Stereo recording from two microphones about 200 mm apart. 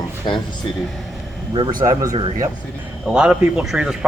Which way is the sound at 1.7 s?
40° right (ahead or behind).